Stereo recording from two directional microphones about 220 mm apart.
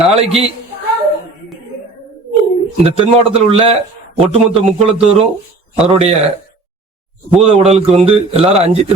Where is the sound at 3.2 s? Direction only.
25° right (ahead or behind).